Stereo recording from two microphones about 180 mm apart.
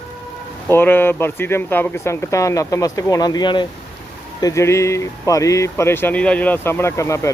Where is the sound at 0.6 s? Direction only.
10° left (ahead or behind).